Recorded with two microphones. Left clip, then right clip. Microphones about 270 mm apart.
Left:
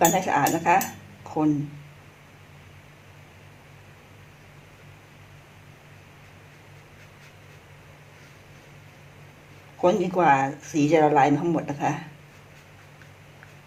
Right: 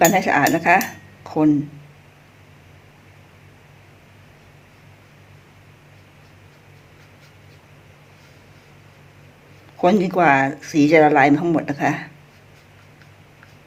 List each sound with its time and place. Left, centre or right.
0.0 s speech: right
9.8 s speech: right